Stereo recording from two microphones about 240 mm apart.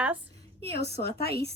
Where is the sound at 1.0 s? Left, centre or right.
Left.